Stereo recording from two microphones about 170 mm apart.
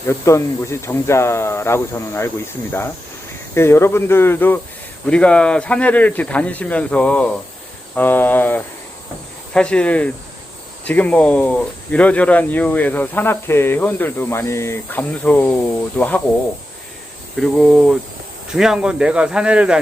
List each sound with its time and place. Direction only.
0.1 s speech: 15° left (ahead or behind)
3.5 s speech: 15° left (ahead or behind)
17.3 s speech: centre (ahead or behind)